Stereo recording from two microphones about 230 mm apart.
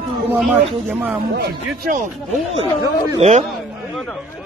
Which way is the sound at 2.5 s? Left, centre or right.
Centre.